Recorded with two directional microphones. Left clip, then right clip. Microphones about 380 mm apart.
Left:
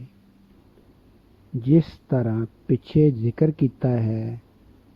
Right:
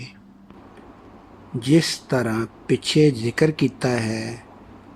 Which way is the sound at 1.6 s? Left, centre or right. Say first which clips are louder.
Right 2 dB; centre.